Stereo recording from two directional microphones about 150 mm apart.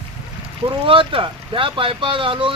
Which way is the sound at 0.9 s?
35° right (ahead or behind).